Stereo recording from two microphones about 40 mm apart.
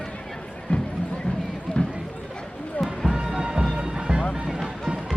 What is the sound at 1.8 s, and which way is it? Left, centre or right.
Run, left.